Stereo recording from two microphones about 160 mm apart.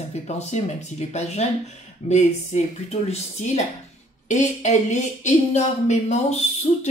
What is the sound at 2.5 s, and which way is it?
Speech, 45° left (ahead or behind).